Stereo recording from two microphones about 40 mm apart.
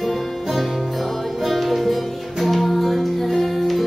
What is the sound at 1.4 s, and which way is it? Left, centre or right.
Music, centre.